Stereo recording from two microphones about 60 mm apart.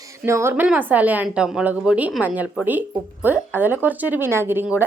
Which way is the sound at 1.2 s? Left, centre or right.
Centre.